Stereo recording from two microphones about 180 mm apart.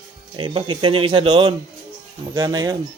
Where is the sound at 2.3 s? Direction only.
20° right (ahead or behind).